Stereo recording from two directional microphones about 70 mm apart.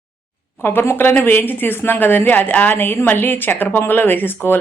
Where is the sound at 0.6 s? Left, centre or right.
Left.